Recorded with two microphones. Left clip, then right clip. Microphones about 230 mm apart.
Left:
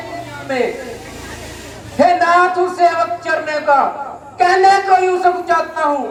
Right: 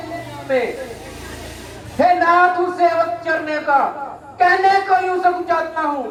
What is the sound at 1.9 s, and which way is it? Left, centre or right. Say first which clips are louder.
A man's voice: left 2 dB; left.